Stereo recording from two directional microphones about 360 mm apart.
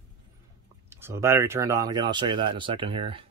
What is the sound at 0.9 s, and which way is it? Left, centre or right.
Speech, centre.